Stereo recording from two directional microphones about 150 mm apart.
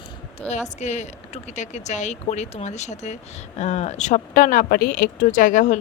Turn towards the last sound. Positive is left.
turn(degrees=60)  # may be behind; listen again after turning